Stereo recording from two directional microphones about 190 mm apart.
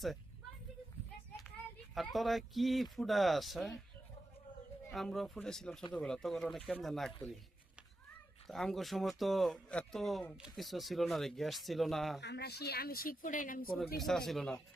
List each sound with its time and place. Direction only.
2.0 s speech: centre (ahead or behind)
4.9 s speech: centre (ahead or behind)
8.4 s speech: centre (ahead or behind)
12.2 s a woman's voice: 60° left (ahead or behind); by 13.7 s 45° left (ahead or behind)
14.0 s speech: centre (ahead or behind)